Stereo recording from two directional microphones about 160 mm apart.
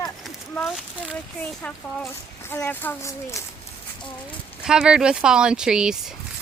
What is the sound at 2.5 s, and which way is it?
Speech, 15° left (ahead or behind).